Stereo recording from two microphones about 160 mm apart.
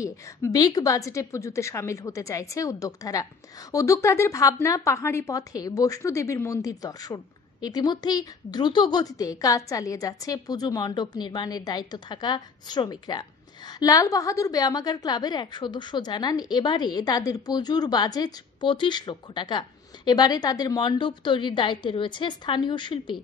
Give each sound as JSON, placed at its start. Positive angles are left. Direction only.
{"t": 0.0, "sound": "a woman's voice", "side_deg": 20}